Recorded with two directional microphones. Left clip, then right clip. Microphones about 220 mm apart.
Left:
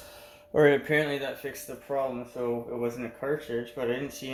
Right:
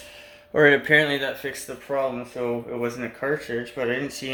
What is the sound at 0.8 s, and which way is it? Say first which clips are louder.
Speech: right 8 dB; 10° right (ahead or behind).